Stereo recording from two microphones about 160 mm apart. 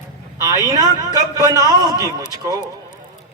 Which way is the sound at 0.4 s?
25° right (ahead or behind).